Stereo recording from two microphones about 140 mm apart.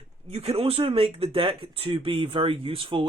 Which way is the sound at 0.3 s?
45° right (ahead or behind).